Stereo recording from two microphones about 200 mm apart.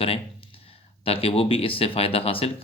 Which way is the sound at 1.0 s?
30° left (ahead or behind).